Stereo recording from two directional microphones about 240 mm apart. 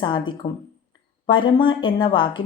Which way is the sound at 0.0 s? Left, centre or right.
Centre.